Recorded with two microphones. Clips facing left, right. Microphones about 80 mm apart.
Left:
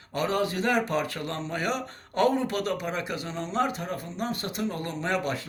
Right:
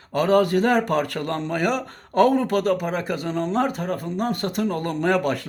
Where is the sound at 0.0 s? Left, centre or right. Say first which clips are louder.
Right 8 dB; right.